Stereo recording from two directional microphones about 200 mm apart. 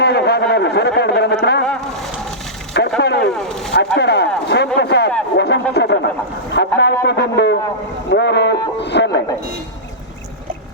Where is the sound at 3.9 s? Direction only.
55° left (ahead or behind).